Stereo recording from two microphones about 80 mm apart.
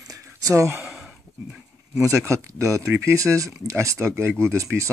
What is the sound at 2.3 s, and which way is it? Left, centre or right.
Speech, right.